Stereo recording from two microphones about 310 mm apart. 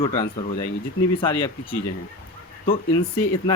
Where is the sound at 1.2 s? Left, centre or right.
Centre.